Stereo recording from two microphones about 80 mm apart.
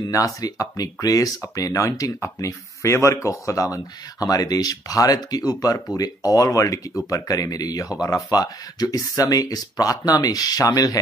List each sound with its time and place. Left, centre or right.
0.1 s speech: left